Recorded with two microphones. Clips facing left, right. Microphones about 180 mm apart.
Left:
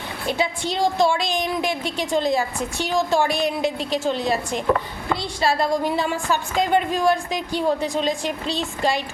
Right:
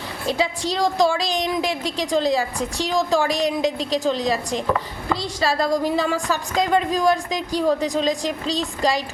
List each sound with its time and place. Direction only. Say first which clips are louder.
0.3 s a woman's voice: right 1 dB; 35° right (ahead or behind)